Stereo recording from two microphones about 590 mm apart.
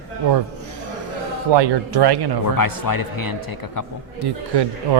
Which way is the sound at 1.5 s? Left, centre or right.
Right.